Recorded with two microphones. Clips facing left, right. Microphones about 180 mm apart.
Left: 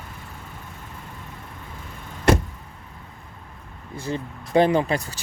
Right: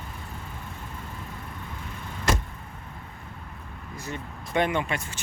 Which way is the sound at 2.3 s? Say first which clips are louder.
Left 9 dB; 60° left (ahead or behind).